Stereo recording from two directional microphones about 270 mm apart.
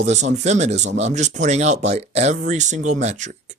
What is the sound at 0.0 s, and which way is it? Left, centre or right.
Speech, right.